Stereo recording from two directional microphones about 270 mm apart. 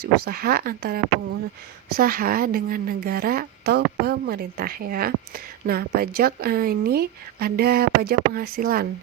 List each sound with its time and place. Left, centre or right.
0.0 s a woman's voice: right